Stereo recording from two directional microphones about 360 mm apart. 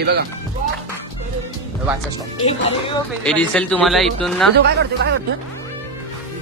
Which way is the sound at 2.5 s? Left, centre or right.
Centre.